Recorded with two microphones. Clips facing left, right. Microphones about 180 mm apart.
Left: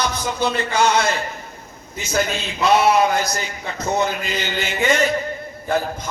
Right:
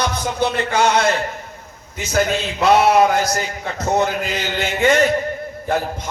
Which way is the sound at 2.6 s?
45° right (ahead or behind).